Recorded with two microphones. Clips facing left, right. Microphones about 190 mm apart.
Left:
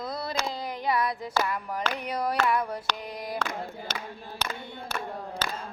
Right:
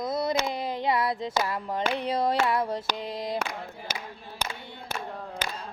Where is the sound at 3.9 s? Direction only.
10° right (ahead or behind).